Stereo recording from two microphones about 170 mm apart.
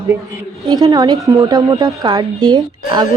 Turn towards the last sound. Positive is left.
turn(degrees=-25)  # may be behind; listen again after turning